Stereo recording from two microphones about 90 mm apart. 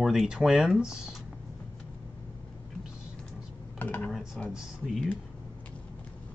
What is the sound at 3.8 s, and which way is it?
Computer keyboard, 20° left (ahead or behind).